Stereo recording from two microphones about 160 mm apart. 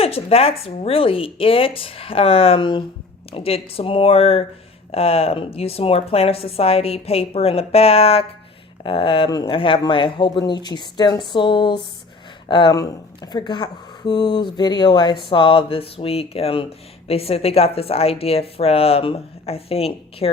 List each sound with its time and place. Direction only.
0.0 s speech: 40° left (ahead or behind)